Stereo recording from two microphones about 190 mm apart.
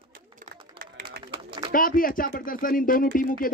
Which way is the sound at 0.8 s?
50° right (ahead or behind).